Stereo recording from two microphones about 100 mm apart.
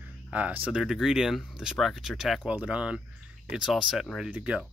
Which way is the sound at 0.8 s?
5° right (ahead or behind).